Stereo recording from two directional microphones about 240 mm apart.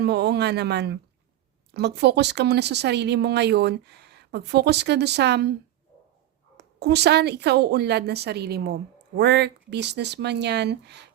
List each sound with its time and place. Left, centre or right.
0.0 s speech: right
6.6 s speech: right